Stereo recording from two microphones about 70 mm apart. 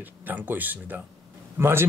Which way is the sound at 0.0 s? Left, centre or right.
Right.